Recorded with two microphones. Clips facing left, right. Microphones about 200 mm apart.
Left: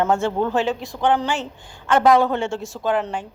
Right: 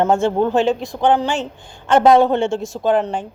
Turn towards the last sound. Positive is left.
turn(degrees=-25)  # may be behind; listen again after turning